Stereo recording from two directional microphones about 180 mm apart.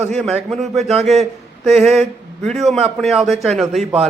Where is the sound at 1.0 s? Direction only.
Centre (ahead or behind).